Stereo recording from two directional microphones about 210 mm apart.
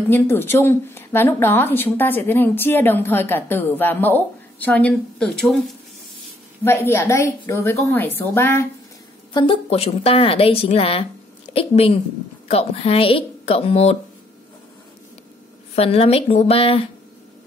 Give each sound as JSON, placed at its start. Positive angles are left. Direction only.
{"t": 0.1, "sound": "a woman's voice", "side_deg": 10}
{"t": 9.3, "sound": "a woman's voice", "side_deg": 25}
{"t": 15.7, "sound": "a woman's voice", "side_deg": 30}